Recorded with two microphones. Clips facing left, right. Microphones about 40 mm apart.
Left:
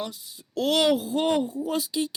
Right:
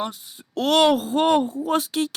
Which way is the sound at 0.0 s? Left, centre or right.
Right.